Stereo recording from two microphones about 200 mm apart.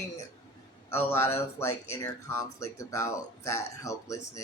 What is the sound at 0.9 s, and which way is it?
Speech, 15° left (ahead or behind).